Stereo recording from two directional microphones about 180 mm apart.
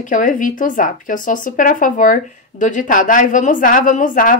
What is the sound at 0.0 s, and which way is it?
Speech, 45° left (ahead or behind).